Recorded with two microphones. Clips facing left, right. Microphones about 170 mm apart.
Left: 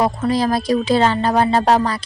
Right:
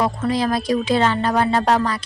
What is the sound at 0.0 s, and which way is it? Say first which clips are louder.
A woman's voice: left 2 dB; 35° left (ahead or behind).